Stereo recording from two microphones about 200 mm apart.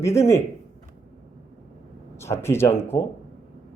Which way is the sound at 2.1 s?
15° left (ahead or behind).